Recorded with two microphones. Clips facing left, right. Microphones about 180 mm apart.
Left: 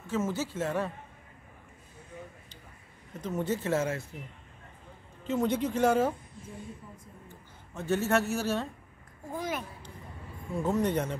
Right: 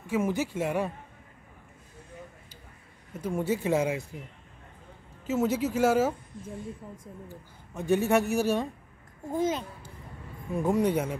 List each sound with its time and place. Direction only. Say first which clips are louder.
0.0 s a man's voice: right 3 dB; 15° right (ahead or behind)
3.1 s a man's voice: right 3 dB; 10° right (ahead or behind)
5.2 s speech: right 2 dB; 5° right (ahead or behind)
7.7 s a man's voice: right 3 dB; 15° right (ahead or behind)